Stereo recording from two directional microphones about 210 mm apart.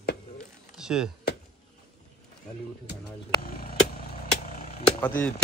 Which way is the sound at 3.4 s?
45° left (ahead or behind).